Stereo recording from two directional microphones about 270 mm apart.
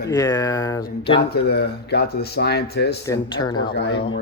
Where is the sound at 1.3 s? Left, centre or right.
Left.